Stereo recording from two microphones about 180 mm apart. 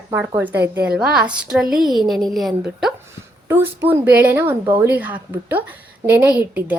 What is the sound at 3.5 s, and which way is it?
A woman's voice, 10° right (ahead or behind).